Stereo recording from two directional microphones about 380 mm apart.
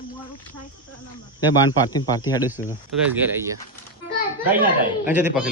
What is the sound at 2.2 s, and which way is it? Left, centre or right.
Speech, centre.